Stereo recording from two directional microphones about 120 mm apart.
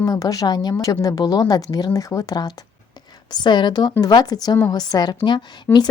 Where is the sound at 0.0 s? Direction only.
30° left (ahead or behind).